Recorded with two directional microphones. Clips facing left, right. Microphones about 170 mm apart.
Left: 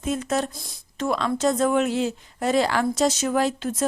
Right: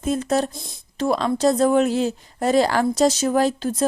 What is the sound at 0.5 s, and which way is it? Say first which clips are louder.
Speech: right 4 dB; 25° right (ahead or behind).